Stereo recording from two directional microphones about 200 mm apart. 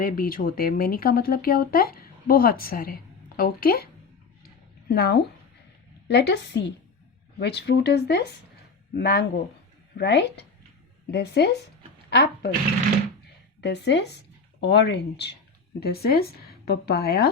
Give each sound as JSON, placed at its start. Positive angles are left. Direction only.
{"t": 0.0, "sound": "speech", "side_deg": 45}
{"t": 4.4, "sound": "a sound", "side_deg": 50}
{"t": 6.1, "sound": "speech", "side_deg": 60}
{"t": 13.6, "sound": "speech", "side_deg": 60}